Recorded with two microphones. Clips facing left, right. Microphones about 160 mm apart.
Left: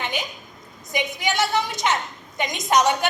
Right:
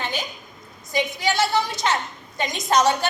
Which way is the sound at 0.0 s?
20° left (ahead or behind).